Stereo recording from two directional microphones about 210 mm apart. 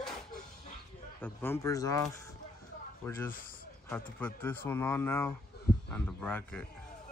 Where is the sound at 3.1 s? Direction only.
10° left (ahead or behind).